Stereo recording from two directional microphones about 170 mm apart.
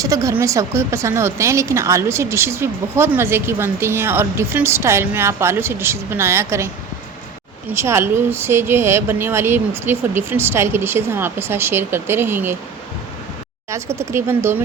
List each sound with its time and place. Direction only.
0.0 s a woman's voice: 20° right (ahead or behind)
7.7 s a woman's voice: 15° right (ahead or behind)
13.7 s a woman's voice: 15° right (ahead or behind)